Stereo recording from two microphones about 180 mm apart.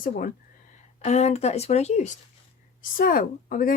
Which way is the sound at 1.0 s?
40° left (ahead or behind).